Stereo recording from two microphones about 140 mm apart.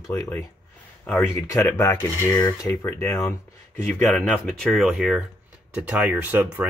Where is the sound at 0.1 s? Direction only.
20° left (ahead or behind).